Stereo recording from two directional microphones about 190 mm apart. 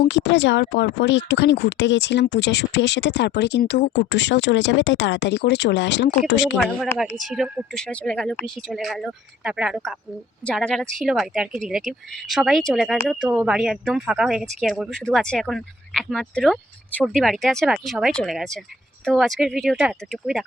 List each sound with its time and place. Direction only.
0.0 s speech: 65° left (ahead or behind)
7.3 s speech: 5° right (ahead or behind)